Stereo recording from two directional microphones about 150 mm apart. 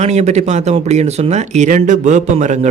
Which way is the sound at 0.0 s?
45° right (ahead or behind).